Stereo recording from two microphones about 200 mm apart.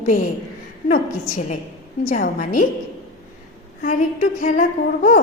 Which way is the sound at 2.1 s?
40° left (ahead or behind).